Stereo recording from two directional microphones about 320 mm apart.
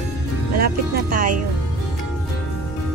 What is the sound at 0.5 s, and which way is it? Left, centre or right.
Music, right.